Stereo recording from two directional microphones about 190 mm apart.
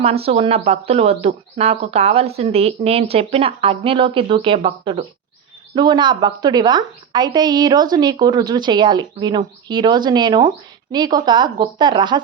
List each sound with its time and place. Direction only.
0.0 s a woman's voice: 30° right (ahead or behind)